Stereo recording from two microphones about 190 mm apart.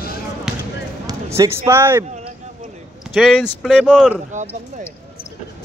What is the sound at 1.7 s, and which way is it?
Speech, 10° right (ahead or behind).